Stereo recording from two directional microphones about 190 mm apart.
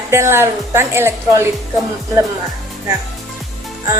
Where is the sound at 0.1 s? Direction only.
15° right (ahead or behind).